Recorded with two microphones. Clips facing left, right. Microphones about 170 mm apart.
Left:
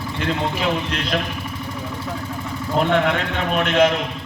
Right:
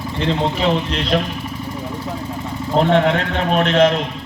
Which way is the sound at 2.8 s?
35° right (ahead or behind).